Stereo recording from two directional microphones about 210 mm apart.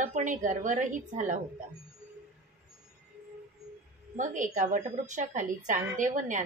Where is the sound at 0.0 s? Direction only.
35° right (ahead or behind).